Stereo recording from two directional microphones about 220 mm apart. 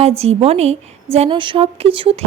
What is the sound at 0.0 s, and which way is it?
A woman's voice, 30° right (ahead or behind).